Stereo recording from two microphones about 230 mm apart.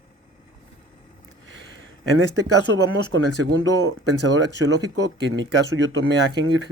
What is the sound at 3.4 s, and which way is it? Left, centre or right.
Speech, right.